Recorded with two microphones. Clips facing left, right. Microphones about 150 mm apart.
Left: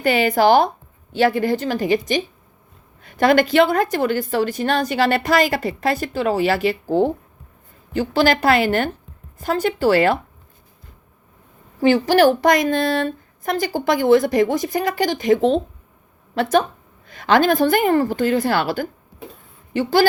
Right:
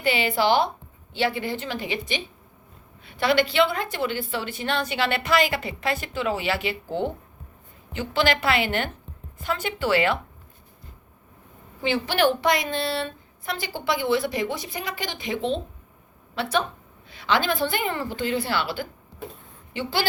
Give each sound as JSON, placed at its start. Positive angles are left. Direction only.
{"t": 0.0, "sound": "a woman's voice", "side_deg": 45}
{"t": 11.8, "sound": "a woman's voice", "side_deg": 45}